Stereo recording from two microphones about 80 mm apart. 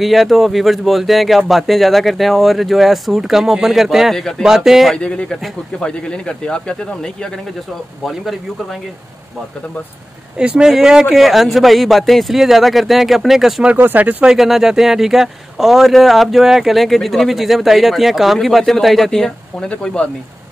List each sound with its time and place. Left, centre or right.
0.0 s speech: centre
4.9 s speech: centre
8.0 s speech: centre
10.3 s speech: centre
13.7 s speech: right
14.2 s speech: centre